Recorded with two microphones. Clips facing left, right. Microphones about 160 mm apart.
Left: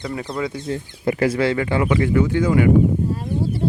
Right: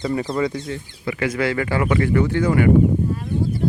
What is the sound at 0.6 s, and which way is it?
Speech, 40° left (ahead or behind).